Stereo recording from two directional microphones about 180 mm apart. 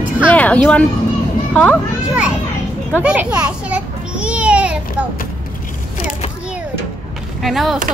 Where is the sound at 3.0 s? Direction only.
5° right (ahead or behind).